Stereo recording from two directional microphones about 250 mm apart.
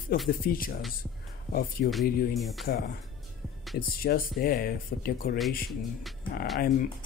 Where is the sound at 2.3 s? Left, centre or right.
Centre.